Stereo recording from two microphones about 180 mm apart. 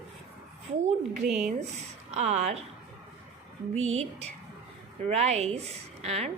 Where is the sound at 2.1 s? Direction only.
40° right (ahead or behind).